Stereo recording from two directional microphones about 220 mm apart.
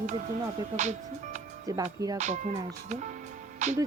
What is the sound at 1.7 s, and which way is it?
Speech, 15° right (ahead or behind).